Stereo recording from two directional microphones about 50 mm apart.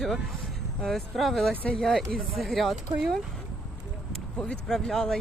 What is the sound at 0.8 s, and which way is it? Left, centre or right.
Speech, centre.